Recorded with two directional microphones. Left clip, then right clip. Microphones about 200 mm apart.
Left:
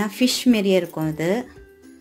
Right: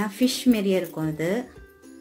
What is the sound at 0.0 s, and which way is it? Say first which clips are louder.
A woman's voice: left 3 dB; 30° left (ahead or behind).